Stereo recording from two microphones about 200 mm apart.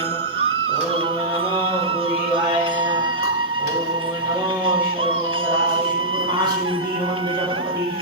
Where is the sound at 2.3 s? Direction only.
25° right (ahead or behind).